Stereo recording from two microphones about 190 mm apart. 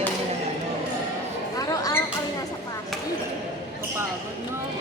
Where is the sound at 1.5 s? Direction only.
20° left (ahead or behind).